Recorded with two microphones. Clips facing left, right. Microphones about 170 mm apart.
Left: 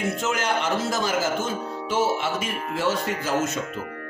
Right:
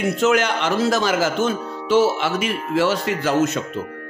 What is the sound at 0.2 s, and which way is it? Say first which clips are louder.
Speech: right 7 dB; 75° right (ahead or behind).